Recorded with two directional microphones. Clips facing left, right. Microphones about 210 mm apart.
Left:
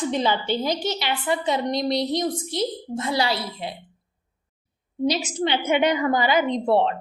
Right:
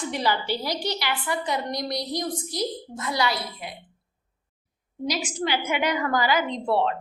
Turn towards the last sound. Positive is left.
turn(degrees=20)  # may be behind; listen again after turning